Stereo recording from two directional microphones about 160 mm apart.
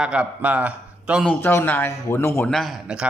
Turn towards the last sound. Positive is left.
turn(degrees=-5)  # may be behind; listen again after turning